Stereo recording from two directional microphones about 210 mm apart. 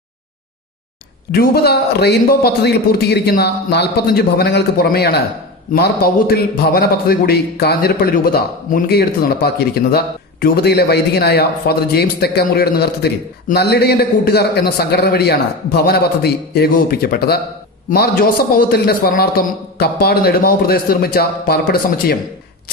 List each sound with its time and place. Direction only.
1.3 s a man's voice: 50° left (ahead or behind)